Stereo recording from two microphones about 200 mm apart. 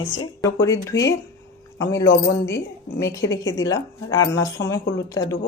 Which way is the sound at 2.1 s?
60° left (ahead or behind).